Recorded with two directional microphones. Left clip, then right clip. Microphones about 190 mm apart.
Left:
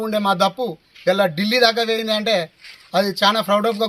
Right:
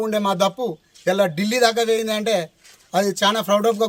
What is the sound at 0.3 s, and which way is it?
A man's voice, 35° right (ahead or behind).